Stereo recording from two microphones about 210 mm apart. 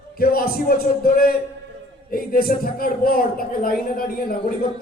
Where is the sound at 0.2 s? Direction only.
45° left (ahead or behind).